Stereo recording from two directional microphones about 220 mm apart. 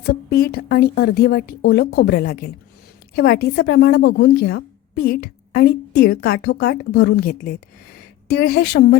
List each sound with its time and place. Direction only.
0.0 s a woman's voice: 45° left (ahead or behind)